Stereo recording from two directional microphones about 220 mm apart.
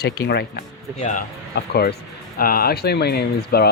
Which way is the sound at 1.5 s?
45° left (ahead or behind).